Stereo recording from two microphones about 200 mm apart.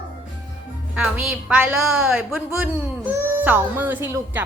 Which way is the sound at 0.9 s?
5° right (ahead or behind).